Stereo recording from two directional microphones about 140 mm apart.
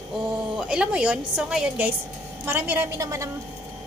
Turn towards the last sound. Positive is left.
turn(degrees=-25)  # may be behind; listen again after turning